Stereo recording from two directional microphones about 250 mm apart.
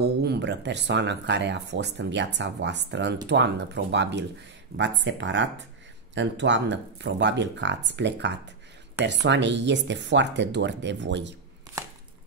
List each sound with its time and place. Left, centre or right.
0.0 s speech: right